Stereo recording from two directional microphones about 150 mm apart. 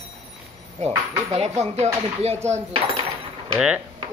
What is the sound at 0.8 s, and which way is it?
Speech, 50° right (ahead or behind).